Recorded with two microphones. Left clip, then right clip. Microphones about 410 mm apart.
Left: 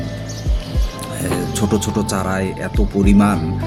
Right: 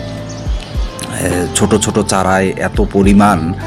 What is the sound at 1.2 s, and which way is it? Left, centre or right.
Speech, left.